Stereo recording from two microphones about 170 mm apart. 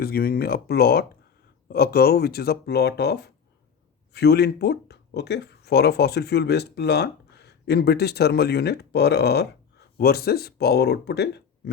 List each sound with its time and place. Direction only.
0.0 s speech: 60° left (ahead or behind)